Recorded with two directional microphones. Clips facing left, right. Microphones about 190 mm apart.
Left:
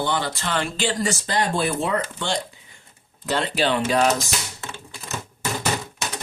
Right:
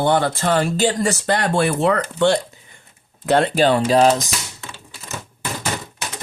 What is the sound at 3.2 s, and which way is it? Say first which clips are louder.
Speech: right 7 dB; 55° right (ahead or behind).